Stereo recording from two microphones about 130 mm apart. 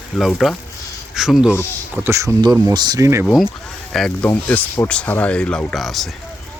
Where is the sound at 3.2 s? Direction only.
Centre (ahead or behind).